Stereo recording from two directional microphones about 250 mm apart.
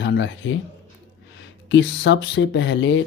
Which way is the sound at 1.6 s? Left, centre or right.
Left.